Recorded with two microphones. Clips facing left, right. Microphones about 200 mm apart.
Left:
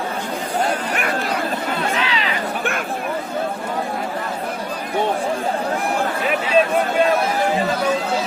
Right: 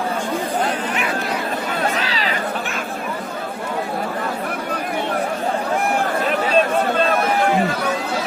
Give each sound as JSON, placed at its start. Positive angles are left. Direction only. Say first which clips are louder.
{"t": 2.0, "sound": "chatter", "louder": "left 1 dB", "side_deg": -35}